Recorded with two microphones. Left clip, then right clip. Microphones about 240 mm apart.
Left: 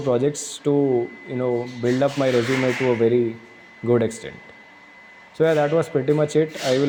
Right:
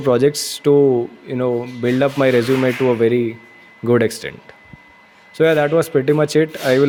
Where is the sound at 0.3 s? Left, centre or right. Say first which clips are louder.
Right 8 dB; right.